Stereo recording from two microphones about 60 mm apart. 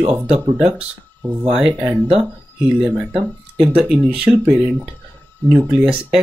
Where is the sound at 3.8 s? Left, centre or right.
Right.